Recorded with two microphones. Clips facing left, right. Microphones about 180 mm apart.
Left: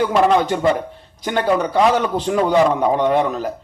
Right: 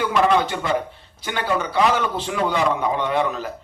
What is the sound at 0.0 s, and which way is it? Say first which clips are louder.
A man's voice: left 3 dB; 45° left (ahead or behind).